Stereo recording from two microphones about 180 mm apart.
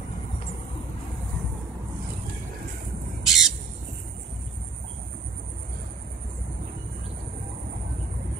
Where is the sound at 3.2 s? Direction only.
Centre (ahead or behind).